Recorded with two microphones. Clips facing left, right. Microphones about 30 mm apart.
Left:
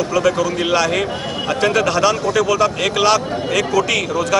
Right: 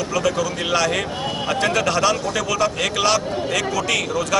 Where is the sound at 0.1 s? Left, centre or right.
Centre.